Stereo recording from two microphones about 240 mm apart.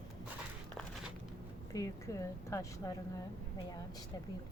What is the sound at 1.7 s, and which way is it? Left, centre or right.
Speech, centre.